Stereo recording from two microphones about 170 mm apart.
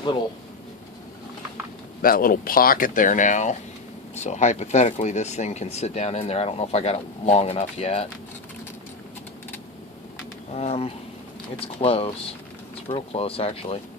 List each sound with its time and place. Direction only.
2.0 s speech: 60° left (ahead or behind); by 8.0 s 40° left (ahead or behind)
10.5 s speech: 40° left (ahead or behind)